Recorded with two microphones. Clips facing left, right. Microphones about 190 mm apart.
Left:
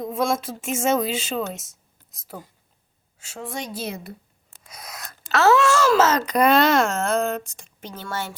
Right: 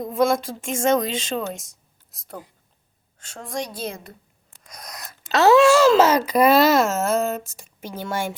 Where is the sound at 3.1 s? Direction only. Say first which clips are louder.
Right 2 dB; 5° left (ahead or behind).